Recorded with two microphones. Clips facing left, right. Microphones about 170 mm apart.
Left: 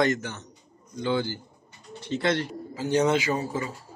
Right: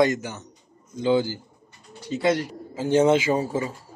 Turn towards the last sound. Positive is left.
turn(degrees=-25)  # may be behind; listen again after turning